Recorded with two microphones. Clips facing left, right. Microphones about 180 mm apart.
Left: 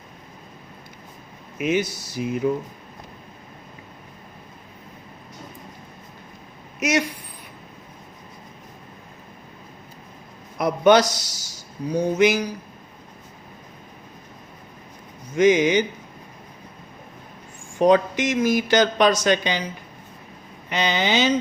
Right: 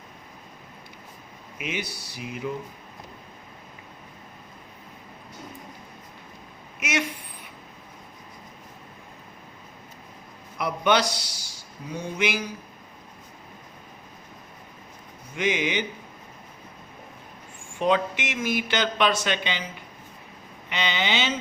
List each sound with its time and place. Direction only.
1.5 s a man's voice: 45° left (ahead or behind)
6.7 s speech: 40° left (ahead or behind)
10.6 s a man's voice: 45° left (ahead or behind)
15.4 s speech: 40° left (ahead or behind)
17.7 s speech: 40° left (ahead or behind)
20.7 s speech: 40° left (ahead or behind)